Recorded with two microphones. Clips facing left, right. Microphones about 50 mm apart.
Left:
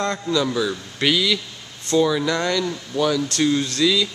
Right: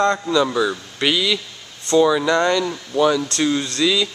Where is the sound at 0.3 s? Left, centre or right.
Centre.